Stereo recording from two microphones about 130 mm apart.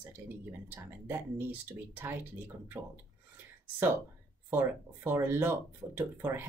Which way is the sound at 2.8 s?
20° right (ahead or behind).